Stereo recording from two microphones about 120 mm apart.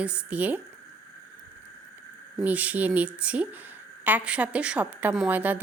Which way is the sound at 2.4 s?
10° right (ahead or behind).